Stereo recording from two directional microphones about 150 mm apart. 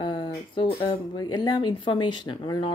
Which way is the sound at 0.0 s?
35° left (ahead or behind).